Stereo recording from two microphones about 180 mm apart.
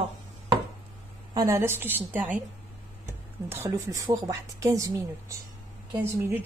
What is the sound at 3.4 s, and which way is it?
A woman's voice, 15° right (ahead or behind).